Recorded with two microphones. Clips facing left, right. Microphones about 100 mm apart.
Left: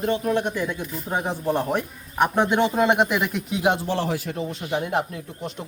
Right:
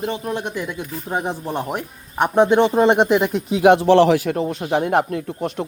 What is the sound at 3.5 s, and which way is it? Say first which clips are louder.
Speech: right 11 dB; 75° right (ahead or behind).